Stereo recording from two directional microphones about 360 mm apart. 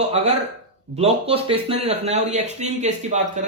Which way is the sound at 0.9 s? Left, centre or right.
Centre.